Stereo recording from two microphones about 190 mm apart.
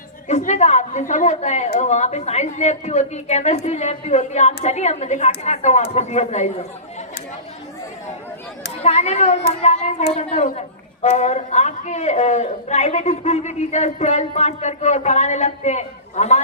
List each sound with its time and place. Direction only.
0.3 s a man's voice: 35° left (ahead or behind)
8.8 s a man's voice: 35° left (ahead or behind)